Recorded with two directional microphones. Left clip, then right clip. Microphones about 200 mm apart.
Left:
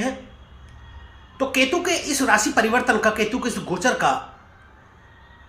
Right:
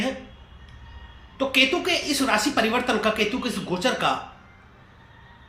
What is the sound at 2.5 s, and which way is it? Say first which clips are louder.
Speech: left 4 dB; 20° left (ahead or behind).